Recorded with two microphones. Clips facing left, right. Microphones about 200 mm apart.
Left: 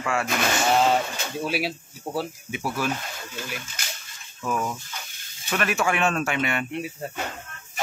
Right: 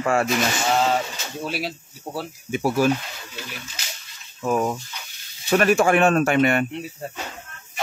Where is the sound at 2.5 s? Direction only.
45° right (ahead or behind).